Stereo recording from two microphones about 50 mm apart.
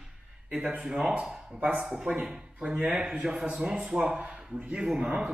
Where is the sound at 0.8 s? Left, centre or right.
Centre.